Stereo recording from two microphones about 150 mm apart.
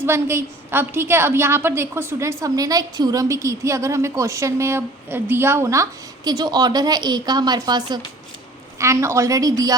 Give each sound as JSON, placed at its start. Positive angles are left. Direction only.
{"t": 0.0, "sound": "a woman's voice", "side_deg": -15}